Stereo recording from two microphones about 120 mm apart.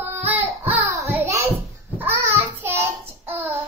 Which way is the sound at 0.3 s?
15° right (ahead or behind).